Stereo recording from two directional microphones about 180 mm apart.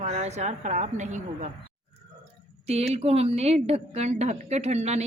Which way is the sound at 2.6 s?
35° right (ahead or behind).